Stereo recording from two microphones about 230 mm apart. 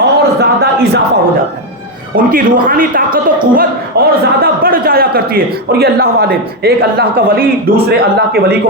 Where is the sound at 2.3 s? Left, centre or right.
Right.